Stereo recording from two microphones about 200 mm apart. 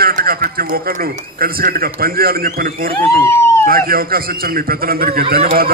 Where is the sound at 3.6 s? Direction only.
45° right (ahead or behind).